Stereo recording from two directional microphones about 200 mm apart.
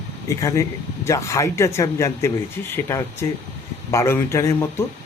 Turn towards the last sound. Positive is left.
turn(degrees=15)  # may be behind; listen again after turning